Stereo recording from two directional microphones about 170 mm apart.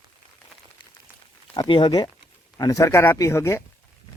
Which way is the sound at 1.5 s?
30° left (ahead or behind).